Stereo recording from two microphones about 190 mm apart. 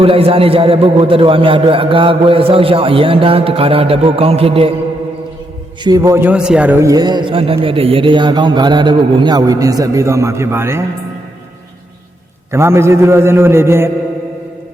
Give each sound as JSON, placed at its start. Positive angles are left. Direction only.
{"t": 0.0, "sound": "a man's voice", "side_deg": -30}
{"t": 5.8, "sound": "a man's voice", "side_deg": -20}
{"t": 12.5, "sound": "a man's voice", "side_deg": -15}